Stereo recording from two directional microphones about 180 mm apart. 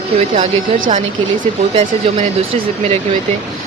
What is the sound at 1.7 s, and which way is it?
Speech, 40° right (ahead or behind).